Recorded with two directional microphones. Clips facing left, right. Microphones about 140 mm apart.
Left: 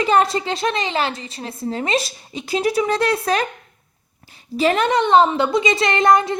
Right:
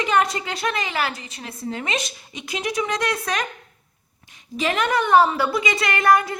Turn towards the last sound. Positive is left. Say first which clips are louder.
# left 3 dB
turn(degrees=25)  # may be behind; listen again after turning